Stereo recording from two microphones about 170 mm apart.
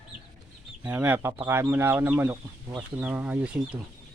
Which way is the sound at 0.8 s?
10° right (ahead or behind).